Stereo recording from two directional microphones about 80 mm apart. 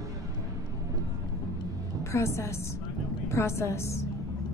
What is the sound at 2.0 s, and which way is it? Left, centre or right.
A woman's voice, left.